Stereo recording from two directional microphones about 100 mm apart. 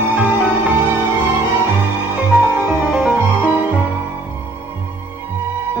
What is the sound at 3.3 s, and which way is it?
Music, 15° left (ahead or behind).